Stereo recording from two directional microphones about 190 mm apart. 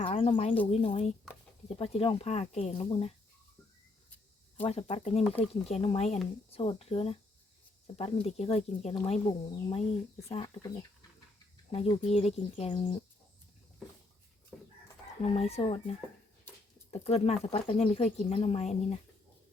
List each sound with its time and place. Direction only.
0.0 s speech: 30° left (ahead or behind)
4.6 s speech: 30° left (ahead or behind)
11.7 s speech: 30° left (ahead or behind)
15.2 s speech: 30° left (ahead or behind)
16.9 s speech: 30° left (ahead or behind)